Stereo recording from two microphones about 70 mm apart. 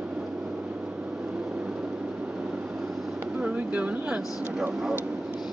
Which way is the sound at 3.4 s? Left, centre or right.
Right.